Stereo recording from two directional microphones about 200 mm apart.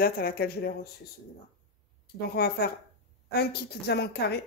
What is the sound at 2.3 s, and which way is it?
Speech, 50° left (ahead or behind).